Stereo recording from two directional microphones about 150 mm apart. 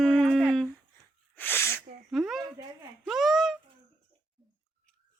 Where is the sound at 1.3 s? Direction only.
15° left (ahead or behind).